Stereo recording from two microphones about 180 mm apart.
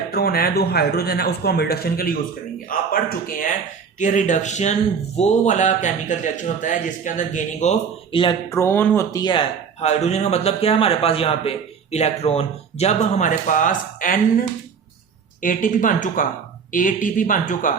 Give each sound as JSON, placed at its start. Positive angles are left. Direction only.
{"t": 0.1, "sound": "a man's voice", "side_deg": 60}
{"t": 8.4, "sound": "speech", "side_deg": 15}
{"t": 9.8, "sound": "a man's voice", "side_deg": 40}